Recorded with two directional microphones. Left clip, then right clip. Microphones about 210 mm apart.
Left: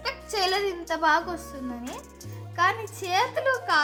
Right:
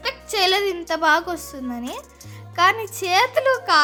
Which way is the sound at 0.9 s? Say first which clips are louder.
Right 4 dB; 45° right (ahead or behind).